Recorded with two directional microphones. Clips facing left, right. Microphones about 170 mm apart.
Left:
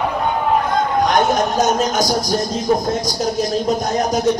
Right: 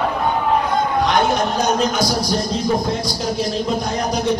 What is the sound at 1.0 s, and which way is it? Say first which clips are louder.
Speech: left 1 dB; 45° left (ahead or behind).